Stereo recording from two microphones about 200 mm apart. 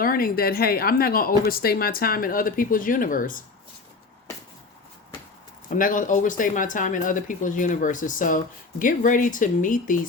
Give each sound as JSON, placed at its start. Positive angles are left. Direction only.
{"t": 0.0, "sound": "a woman's voice", "side_deg": 45}
{"t": 5.7, "sound": "speech", "side_deg": 40}